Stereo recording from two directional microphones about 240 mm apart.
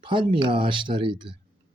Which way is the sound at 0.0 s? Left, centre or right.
Right.